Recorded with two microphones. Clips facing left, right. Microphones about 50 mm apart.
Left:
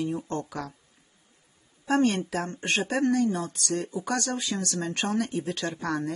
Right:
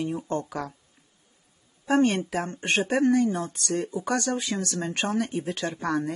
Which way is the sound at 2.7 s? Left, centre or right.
Right.